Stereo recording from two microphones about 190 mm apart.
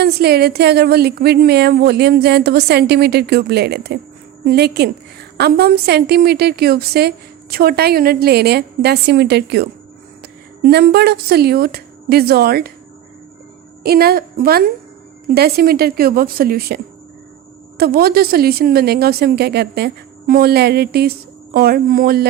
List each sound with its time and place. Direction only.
0.0 s speech: 55° right (ahead or behind)
13.8 s a woman's voice: 55° right (ahead or behind)